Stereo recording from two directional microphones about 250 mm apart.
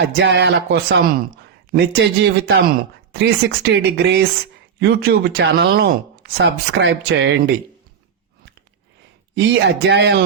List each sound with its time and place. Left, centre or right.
0.0 s speech: right
9.3 s speech: right